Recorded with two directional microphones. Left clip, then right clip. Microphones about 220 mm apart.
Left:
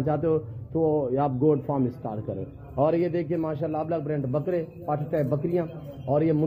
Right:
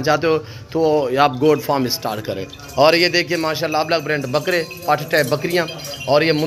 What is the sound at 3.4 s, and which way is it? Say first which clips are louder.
A man's voice: right 9 dB; 10° right (ahead or behind).